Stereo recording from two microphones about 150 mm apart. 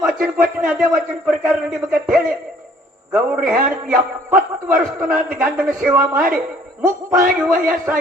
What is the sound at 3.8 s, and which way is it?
A man's voice, 10° right (ahead or behind).